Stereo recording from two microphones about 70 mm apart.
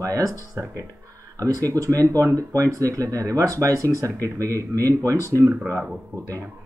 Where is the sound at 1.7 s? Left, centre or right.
Right.